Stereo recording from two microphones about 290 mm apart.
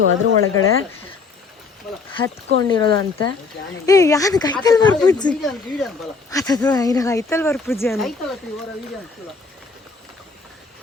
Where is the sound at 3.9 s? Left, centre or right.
Centre.